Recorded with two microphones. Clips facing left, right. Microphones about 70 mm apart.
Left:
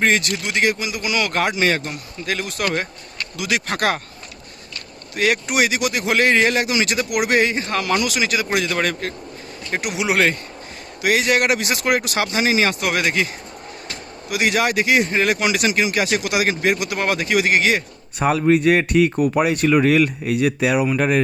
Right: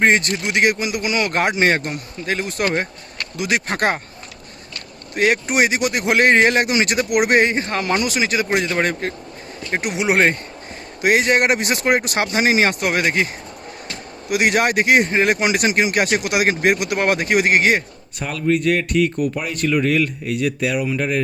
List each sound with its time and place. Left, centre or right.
0.0 s speech: right
0.5 s speech: right
2.3 s a man's voice: right
3.3 s speech: right
5.1 s speech: right
7.7 s a man's voice: right
9.8 s speech: right
14.3 s speech: right
15.1 s speech: right
18.3 s speech: left